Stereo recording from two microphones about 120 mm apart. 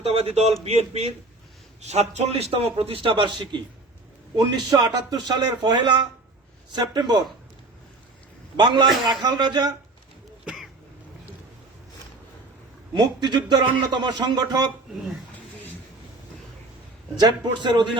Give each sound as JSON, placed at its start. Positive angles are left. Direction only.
{"t": 0.0, "sound": "a man's voice", "side_deg": -55}
{"t": 8.5, "sound": "a man's voice", "side_deg": -40}
{"t": 10.4, "sound": "cough", "side_deg": -5}
{"t": 12.9, "sound": "a man's voice", "side_deg": -35}
{"t": 17.2, "sound": "a man's voice", "side_deg": -35}